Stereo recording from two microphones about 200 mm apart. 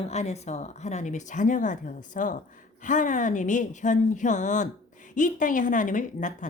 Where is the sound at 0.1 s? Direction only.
35° left (ahead or behind).